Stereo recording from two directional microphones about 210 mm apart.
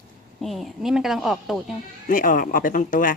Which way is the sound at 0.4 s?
Centre (ahead or behind).